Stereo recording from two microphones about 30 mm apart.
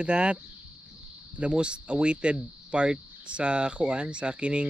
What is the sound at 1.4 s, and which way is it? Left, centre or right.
Speech, right.